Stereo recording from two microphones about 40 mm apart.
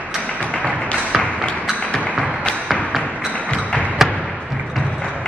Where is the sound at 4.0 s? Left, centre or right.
Centre.